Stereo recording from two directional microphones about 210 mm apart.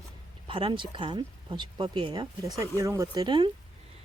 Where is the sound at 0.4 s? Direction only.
25° right (ahead or behind).